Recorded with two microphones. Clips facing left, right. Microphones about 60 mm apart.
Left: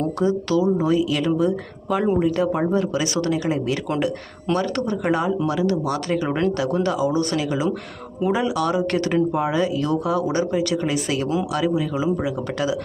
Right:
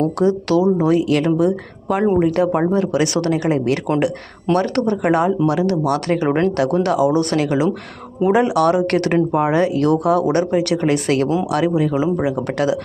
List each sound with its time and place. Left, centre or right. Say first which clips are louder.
0.0 s speech: right 4 dB; right
6.2 s speech: right 6 dB; right
6.8 s speech: right 5 dB; right